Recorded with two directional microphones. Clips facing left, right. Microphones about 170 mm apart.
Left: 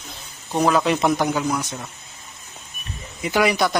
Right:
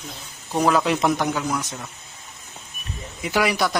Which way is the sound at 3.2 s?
Centre (ahead or behind).